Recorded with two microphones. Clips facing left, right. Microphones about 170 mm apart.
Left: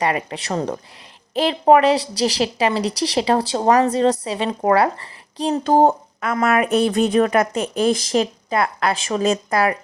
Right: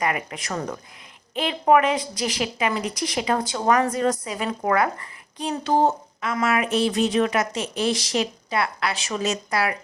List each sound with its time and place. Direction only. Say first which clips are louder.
0.0 s a woman's voice: left 4 dB; 30° left (ahead or behind); by 9.7 s 50° left (ahead or behind)